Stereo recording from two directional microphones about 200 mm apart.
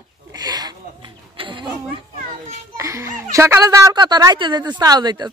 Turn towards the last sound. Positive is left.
turn(degrees=-20)  # may be behind; listen again after turning